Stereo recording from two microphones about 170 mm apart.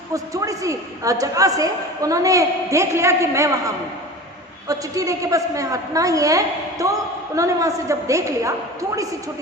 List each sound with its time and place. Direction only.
0.1 s a woman's voice: 20° right (ahead or behind)
4.7 s a woman's voice: 20° right (ahead or behind)